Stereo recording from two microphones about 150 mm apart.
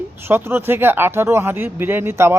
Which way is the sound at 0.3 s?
15° right (ahead or behind).